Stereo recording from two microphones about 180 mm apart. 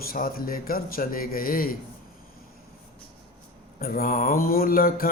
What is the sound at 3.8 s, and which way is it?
Mantra, 55° left (ahead or behind).